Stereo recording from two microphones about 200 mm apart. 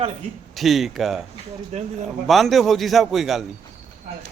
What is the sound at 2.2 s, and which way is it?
A man's voice, centre (ahead or behind).